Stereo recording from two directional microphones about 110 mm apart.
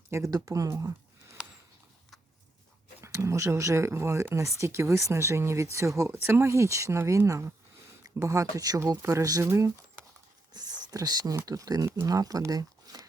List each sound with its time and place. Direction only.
0.1 s speech: 30° right (ahead or behind)
1.4 s a sound: 5° right (ahead or behind)
3.0 s speech: 25° right (ahead or behind)
10.5 s speech: 40° right (ahead or behind)